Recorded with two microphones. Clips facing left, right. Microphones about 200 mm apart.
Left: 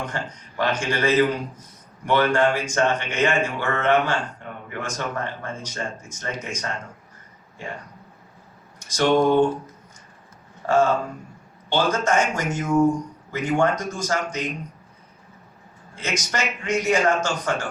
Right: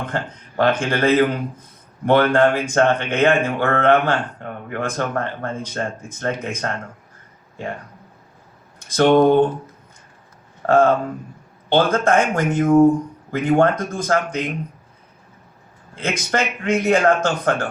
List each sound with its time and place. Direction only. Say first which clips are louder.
0.0 s speech: right 4 dB; 55° right (ahead or behind)
8.8 s speech: right 5 dB; 55° right (ahead or behind)
10.7 s speech: right 4 dB; 55° right (ahead or behind)
16.0 s speech: right 5 dB; 55° right (ahead or behind)